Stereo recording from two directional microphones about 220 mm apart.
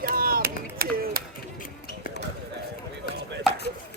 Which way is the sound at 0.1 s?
40° right (ahead or behind).